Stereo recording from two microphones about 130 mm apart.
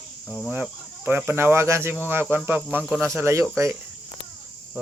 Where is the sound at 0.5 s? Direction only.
15° right (ahead or behind).